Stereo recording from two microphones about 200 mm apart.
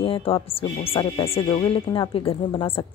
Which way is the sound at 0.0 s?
30° left (ahead or behind).